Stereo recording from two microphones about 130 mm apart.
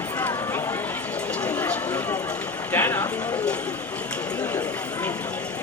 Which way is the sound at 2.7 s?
20° left (ahead or behind).